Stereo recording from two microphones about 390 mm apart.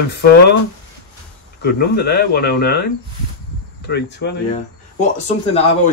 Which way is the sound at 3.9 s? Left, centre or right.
Left.